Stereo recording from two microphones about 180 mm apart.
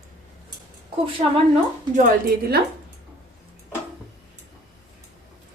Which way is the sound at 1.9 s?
50° right (ahead or behind).